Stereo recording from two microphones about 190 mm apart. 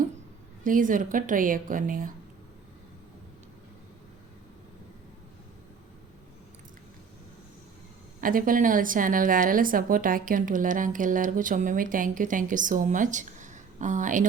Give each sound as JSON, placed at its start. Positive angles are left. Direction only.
{"t": 0.6, "sound": "a woman's voice", "side_deg": -45}
{"t": 8.2, "sound": "a woman's voice", "side_deg": -45}